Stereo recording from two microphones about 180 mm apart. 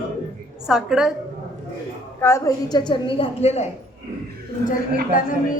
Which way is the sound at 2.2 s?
15° left (ahead or behind).